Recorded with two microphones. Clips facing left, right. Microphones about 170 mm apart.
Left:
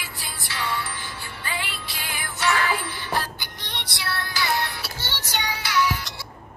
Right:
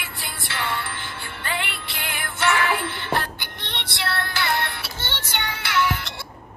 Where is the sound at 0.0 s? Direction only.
55° right (ahead or behind).